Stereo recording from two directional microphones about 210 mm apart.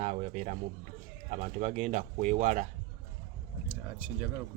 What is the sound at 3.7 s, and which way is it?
Speech, 10° right (ahead or behind).